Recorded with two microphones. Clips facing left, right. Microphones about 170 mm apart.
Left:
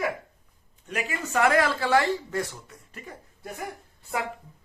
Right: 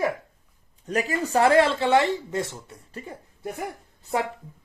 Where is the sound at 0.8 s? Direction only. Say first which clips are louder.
Right 6 dB; 35° right (ahead or behind).